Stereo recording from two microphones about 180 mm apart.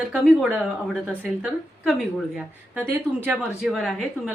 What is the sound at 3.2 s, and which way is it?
Speech, 5° right (ahead or behind).